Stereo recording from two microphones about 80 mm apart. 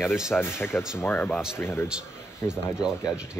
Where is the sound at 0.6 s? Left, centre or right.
Left.